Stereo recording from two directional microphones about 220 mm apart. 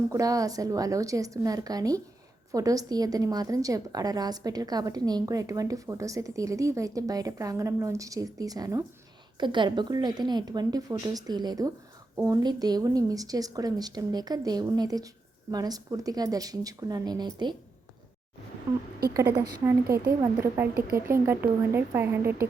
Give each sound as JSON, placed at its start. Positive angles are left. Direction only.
{"t": 0.1, "sound": "a woman's voice", "side_deg": -15}
{"t": 19.4, "sound": "a woman's voice", "side_deg": -20}
{"t": 20.7, "sound": "speech", "side_deg": -45}
{"t": 21.1, "sound": "a woman's voice", "side_deg": -10}